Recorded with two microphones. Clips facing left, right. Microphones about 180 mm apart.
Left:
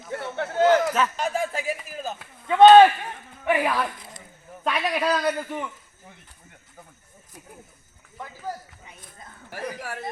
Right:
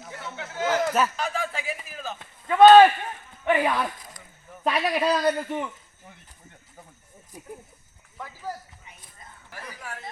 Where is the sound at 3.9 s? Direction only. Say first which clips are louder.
Left 2 dB; 25° left (ahead or behind).